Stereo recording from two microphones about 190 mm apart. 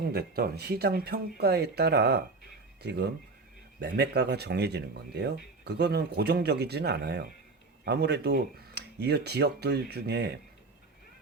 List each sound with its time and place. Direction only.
0.1 s speech: 55° right (ahead or behind)